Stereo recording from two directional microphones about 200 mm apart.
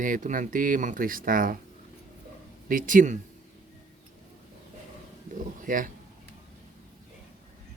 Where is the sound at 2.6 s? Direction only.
40° right (ahead or behind).